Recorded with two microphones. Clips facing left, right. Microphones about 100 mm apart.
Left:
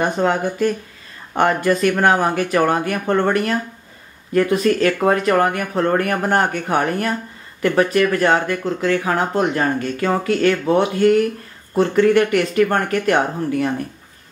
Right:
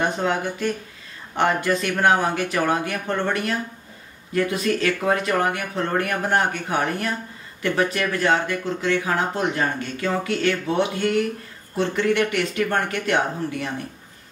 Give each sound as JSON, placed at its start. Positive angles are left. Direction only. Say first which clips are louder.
{"t": 0.0, "sound": "speech", "louder": "left 4 dB", "side_deg": 45}